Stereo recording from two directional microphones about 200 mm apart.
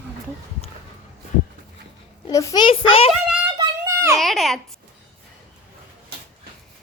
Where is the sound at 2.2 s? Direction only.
20° left (ahead or behind).